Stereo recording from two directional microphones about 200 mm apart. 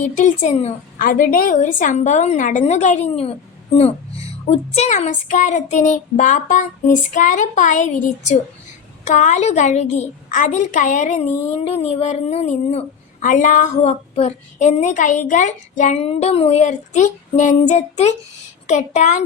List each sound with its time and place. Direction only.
0.0 s a woman's voice: 35° left (ahead or behind)
4.4 s a woman's voice: 30° left (ahead or behind)